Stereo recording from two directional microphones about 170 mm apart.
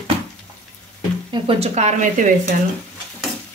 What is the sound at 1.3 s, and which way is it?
Speech, 40° right (ahead or behind).